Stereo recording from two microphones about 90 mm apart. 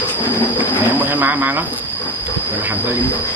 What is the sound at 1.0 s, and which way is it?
Speech, 20° right (ahead or behind).